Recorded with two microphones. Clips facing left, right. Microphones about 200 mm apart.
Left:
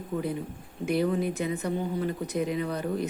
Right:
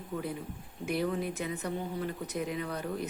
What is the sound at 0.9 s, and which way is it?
Speech, centre (ahead or behind).